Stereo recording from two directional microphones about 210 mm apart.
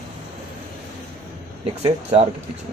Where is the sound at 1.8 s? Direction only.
30° right (ahead or behind).